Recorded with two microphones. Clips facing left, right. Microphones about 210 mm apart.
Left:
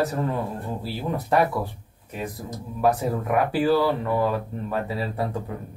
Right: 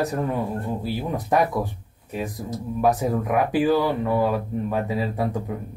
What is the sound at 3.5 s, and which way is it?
Speech, 15° right (ahead or behind).